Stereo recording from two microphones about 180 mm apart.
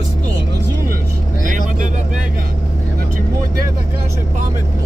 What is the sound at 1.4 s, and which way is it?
Vehicle, 45° right (ahead or behind).